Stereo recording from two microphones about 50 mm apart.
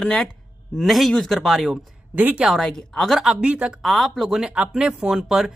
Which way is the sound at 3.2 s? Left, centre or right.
Right.